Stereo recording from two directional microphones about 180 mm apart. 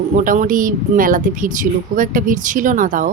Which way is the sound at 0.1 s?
45° right (ahead or behind).